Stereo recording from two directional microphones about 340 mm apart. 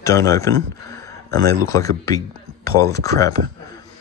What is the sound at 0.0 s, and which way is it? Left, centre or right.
Speech, centre.